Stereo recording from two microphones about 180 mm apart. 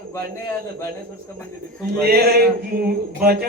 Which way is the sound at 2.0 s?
60° right (ahead or behind).